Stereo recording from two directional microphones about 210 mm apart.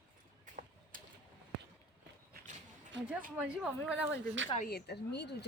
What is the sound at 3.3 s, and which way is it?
Speech, 5° right (ahead or behind).